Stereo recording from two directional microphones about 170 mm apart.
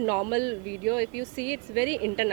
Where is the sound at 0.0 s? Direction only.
20° right (ahead or behind).